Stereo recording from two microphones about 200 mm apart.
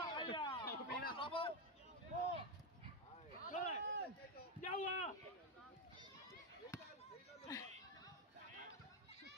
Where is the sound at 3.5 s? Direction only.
35° left (ahead or behind).